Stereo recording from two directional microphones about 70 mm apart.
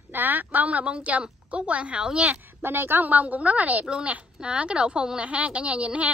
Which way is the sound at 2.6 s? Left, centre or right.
Right.